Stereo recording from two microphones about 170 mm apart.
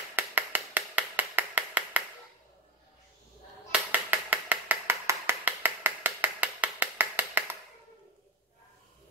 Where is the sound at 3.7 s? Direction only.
10° right (ahead or behind).